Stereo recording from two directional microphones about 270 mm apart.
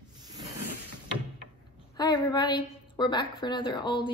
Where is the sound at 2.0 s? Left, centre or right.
Centre.